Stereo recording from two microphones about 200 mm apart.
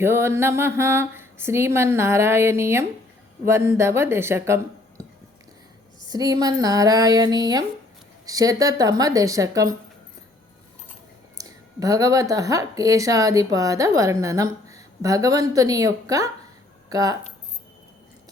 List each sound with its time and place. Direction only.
0.0 s speech: 10° right (ahead or behind)
6.1 s a sound: 20° right (ahead or behind)
8.3 s speech: 15° right (ahead or behind)
11.3 s speech: 15° right (ahead or behind)